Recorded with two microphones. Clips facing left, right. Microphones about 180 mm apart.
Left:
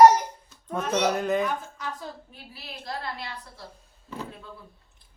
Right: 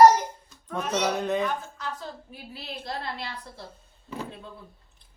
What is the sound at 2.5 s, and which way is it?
A woman's voice, 25° right (ahead or behind).